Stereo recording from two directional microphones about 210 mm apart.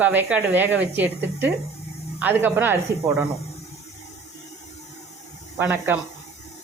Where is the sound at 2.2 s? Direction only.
10° right (ahead or behind).